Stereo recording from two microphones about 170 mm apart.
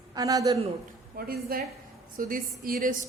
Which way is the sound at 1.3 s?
60° right (ahead or behind).